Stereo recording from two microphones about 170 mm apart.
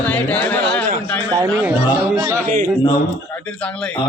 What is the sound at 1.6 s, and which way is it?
Speech, 10° right (ahead or behind).